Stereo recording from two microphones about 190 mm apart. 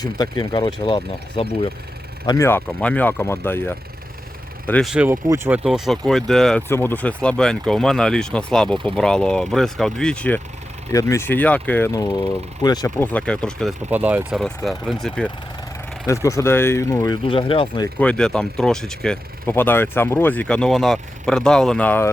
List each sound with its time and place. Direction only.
0.0 s speech: 20° left (ahead or behind)
2.2 s speech: 15° left (ahead or behind)
4.9 s speech: 10° right (ahead or behind)
5.6 s speech: centre (ahead or behind)
13.9 s speech: 10° right (ahead or behind)
16.0 s speech: 15° left (ahead or behind)
18.0 s speech: 5° left (ahead or behind)